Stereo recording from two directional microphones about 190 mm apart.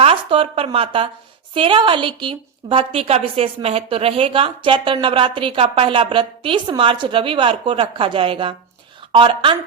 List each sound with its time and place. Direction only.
0.0 s a woman's voice: 30° right (ahead or behind)